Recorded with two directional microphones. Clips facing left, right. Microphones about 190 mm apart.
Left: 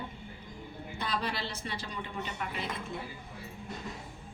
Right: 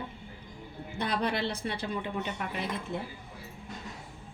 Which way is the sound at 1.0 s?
60° right (ahead or behind).